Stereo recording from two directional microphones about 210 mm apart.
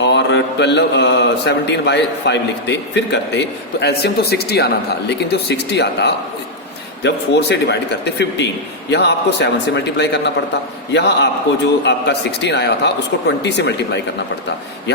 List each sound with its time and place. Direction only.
0.0 s speech: 55° left (ahead or behind)